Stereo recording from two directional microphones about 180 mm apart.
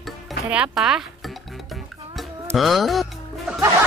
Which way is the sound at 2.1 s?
Centre (ahead or behind).